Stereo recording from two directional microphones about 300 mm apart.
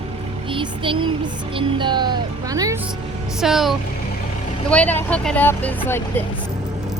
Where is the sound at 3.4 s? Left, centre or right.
Centre.